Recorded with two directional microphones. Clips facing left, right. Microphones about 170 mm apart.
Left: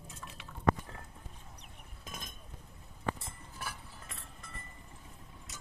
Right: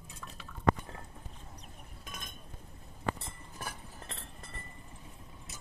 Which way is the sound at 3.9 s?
40° right (ahead or behind).